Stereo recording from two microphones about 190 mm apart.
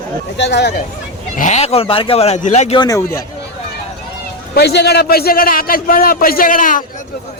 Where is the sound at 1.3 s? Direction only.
40° left (ahead or behind).